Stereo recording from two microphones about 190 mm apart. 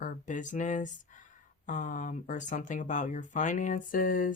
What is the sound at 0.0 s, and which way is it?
Speech, 40° left (ahead or behind).